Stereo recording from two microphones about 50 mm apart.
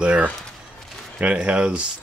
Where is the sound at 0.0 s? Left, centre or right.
Right.